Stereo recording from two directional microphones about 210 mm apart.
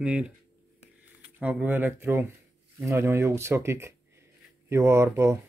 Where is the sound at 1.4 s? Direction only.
5° right (ahead or behind).